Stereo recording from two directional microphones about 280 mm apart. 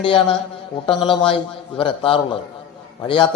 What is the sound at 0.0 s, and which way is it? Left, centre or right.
A man's voice, centre.